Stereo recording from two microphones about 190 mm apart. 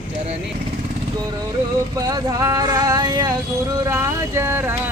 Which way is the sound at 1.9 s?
20° right (ahead or behind).